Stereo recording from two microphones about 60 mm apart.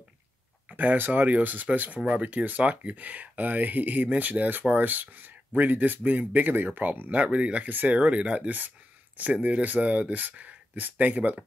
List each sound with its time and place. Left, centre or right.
0.7 s speech: right